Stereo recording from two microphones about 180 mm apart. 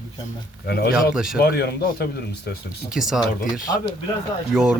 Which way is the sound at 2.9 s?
Centre (ahead or behind).